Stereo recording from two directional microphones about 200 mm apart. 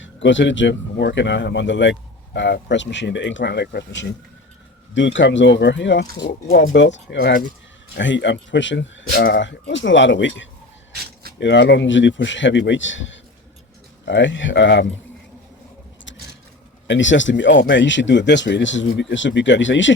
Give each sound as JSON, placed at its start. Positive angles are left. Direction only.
{"t": 0.0, "sound": "speech", "side_deg": 65}
{"t": 11.0, "sound": "a sound", "side_deg": -50}
{"t": 11.3, "sound": "speech", "side_deg": 60}
{"t": 16.8, "sound": "speech", "side_deg": 65}